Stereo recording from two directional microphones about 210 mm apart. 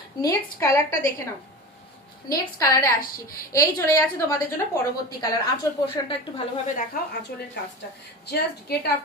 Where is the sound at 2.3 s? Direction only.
15° left (ahead or behind).